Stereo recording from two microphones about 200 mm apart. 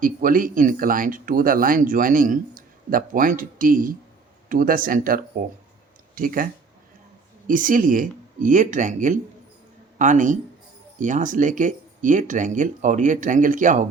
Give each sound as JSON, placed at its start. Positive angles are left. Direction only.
{"t": 0.0, "sound": "speech", "side_deg": -45}